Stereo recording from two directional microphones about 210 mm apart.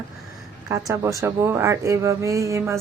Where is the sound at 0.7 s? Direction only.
15° right (ahead or behind).